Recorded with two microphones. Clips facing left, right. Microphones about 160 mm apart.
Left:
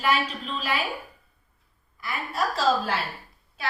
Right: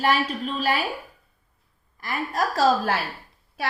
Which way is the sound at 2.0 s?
40° right (ahead or behind).